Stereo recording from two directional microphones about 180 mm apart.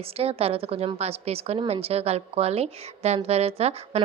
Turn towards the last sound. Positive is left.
turn(degrees=-35)  # may be behind; listen again after turning